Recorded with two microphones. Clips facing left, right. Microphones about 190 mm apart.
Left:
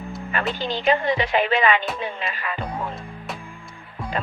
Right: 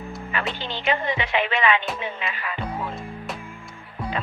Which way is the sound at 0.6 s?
40° left (ahead or behind).